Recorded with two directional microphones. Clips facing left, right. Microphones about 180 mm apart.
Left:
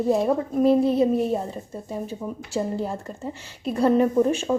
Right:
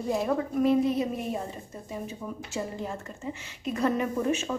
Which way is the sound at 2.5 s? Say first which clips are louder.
Left 8 dB; 35° left (ahead or behind).